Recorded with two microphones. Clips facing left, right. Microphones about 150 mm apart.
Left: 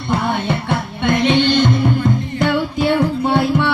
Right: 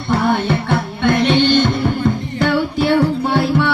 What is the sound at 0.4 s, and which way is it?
Music, 15° left (ahead or behind).